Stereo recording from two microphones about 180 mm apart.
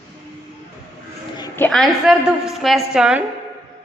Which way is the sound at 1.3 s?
15° left (ahead or behind).